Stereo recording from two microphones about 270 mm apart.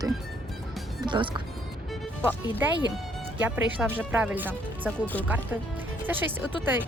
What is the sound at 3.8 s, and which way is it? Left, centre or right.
Speech, centre.